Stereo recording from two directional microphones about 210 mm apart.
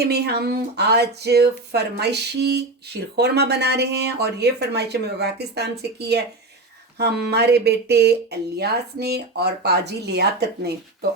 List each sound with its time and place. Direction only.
0.0 s speech: 50° right (ahead or behind)
7.3 s speech: 50° right (ahead or behind)